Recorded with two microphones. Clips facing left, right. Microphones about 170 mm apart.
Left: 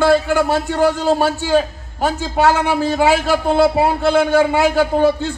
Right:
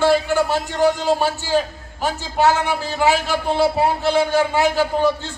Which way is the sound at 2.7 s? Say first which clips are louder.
Left 4 dB; 50° left (ahead or behind).